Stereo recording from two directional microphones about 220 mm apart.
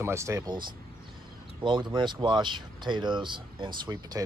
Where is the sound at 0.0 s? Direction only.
10° right (ahead or behind).